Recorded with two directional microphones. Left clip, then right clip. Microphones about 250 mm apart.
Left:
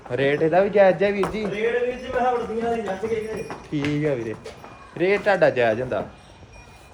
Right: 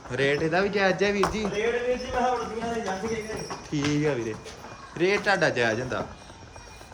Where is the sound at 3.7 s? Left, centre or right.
Centre.